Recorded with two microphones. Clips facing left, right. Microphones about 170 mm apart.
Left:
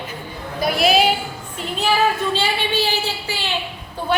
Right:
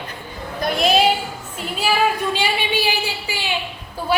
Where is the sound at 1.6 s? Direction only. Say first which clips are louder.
Left 1 dB; 10° right (ahead or behind).